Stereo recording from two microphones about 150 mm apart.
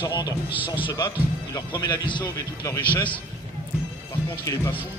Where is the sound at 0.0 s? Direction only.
30° left (ahead or behind).